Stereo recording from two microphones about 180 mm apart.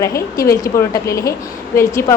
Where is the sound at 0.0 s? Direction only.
15° left (ahead or behind).